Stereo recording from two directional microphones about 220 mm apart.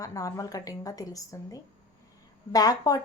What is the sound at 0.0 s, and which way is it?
A woman's voice, 15° left (ahead or behind).